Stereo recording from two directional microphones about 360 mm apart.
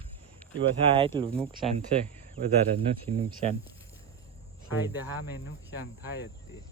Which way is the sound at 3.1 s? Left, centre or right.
Centre.